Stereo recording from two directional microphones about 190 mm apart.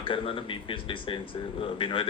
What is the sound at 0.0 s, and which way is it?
A man's voice, 25° left (ahead or behind).